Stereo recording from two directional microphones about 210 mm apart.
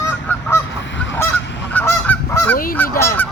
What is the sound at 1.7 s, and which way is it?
Goose, 10° left (ahead or behind).